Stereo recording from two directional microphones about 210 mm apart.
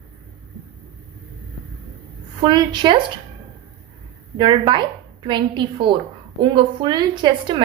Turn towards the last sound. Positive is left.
turn(degrees=-20)  # may be behind; listen again after turning